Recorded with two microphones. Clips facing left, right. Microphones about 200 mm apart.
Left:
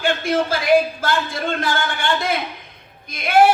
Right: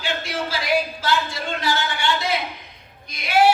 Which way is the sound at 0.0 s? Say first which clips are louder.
Left 7 dB; 50° left (ahead or behind).